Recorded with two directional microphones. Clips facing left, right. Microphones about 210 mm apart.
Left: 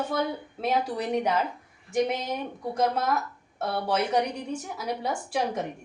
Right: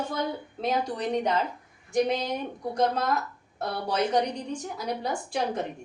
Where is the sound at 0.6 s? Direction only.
5° left (ahead or behind).